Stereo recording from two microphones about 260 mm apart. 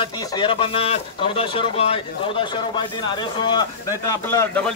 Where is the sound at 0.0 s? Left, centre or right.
Centre.